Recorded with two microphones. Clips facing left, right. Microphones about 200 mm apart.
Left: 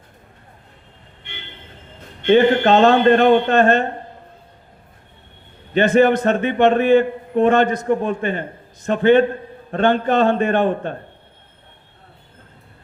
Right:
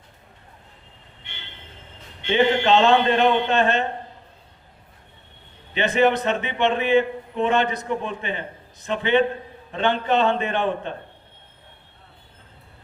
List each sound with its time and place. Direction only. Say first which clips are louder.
2.2 s a man's voice: left 6 dB; 50° left (ahead or behind)
5.7 s a man's voice: left 6 dB; 45° left (ahead or behind)